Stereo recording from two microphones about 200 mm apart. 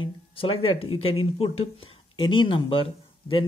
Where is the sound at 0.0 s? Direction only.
25° left (ahead or behind).